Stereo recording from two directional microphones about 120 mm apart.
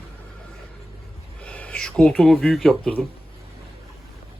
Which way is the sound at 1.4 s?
10° left (ahead or behind).